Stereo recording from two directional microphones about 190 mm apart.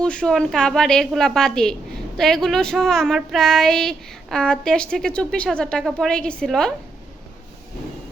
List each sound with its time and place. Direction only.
0.0 s speech: 5° left (ahead or behind)